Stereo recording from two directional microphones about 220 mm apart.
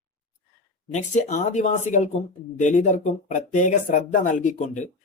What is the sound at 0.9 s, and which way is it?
Speech, 35° left (ahead or behind).